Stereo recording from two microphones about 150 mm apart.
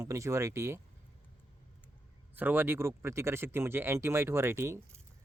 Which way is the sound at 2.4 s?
15° right (ahead or behind).